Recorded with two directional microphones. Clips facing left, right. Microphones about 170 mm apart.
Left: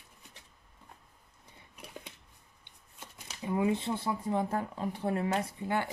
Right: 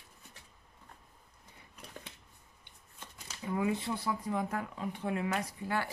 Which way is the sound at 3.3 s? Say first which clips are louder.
Left 3 dB; 20° left (ahead or behind).